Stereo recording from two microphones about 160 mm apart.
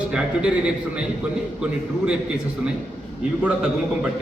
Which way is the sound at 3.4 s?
5° right (ahead or behind).